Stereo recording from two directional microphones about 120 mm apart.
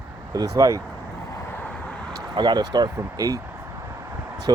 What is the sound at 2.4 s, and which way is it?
Speech, 35° right (ahead or behind).